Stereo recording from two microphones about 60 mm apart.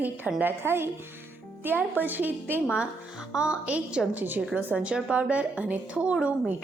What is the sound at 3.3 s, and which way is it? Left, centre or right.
A woman's voice, centre.